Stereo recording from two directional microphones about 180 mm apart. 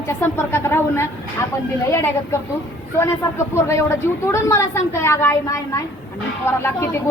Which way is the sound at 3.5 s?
15° left (ahead or behind).